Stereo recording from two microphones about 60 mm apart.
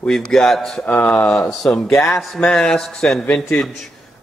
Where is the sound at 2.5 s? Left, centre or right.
Centre.